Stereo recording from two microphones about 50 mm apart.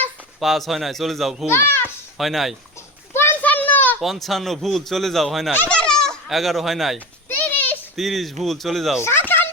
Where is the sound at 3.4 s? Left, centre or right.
Left.